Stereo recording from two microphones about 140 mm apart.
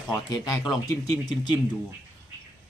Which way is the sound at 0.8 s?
30° left (ahead or behind).